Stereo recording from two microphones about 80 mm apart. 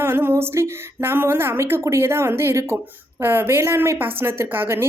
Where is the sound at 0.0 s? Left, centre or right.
Right.